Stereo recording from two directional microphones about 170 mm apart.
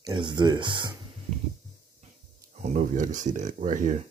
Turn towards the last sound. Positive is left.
turn(degrees=-45)  # may be behind; listen again after turning